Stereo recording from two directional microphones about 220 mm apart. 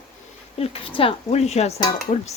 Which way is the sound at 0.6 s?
25° left (ahead or behind).